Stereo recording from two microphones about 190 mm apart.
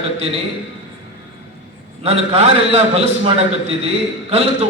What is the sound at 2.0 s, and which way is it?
A man's voice, 35° right (ahead or behind).